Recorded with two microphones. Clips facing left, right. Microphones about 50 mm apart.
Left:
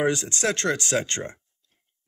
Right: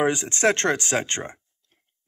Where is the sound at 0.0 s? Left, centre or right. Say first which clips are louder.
Right 3 dB; right.